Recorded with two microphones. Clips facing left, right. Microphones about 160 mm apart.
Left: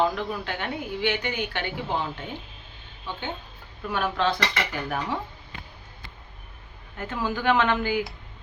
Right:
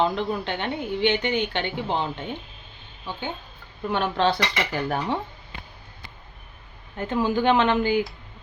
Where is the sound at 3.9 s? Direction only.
30° right (ahead or behind).